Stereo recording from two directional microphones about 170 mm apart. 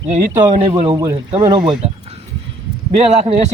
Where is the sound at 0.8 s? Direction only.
25° right (ahead or behind).